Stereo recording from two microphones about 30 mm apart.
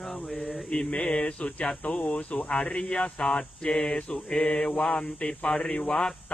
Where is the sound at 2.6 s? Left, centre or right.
Left.